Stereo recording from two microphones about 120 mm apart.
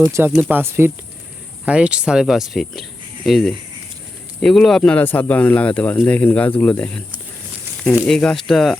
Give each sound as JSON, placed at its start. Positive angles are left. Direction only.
{"t": 0.0, "sound": "speech", "side_deg": -25}
{"t": 8.0, "sound": "speech", "side_deg": 5}